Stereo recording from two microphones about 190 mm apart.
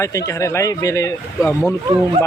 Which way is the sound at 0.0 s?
15° left (ahead or behind).